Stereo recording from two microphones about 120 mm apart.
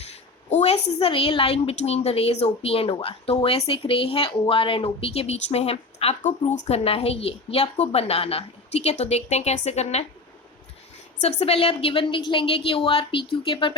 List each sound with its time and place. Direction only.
0.1 s a woman's voice: 60° left (ahead or behind)
11.2 s speech: 55° left (ahead or behind)